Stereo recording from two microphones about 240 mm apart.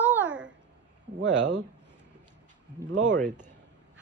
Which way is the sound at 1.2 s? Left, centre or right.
Right.